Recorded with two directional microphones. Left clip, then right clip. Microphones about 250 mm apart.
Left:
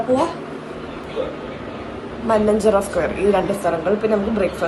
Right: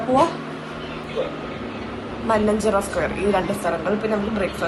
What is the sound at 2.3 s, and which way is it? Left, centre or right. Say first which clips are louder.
A woman's voice: left 4 dB; centre.